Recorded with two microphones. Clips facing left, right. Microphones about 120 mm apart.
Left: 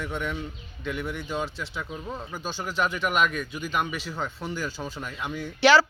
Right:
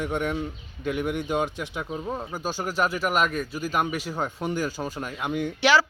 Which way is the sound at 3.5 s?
40° right (ahead or behind).